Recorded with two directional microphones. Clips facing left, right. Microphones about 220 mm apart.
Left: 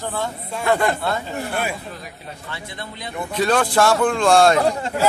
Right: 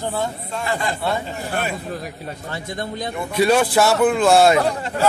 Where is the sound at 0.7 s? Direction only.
60° left (ahead or behind).